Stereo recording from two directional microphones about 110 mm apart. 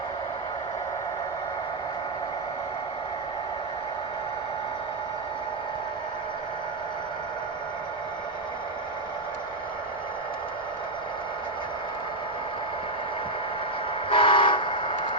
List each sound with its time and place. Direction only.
14.1 s vehicle: 50° left (ahead or behind)